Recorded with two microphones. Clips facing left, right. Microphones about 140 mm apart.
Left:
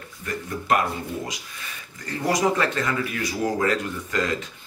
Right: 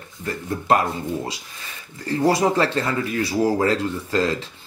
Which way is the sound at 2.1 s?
30° right (ahead or behind).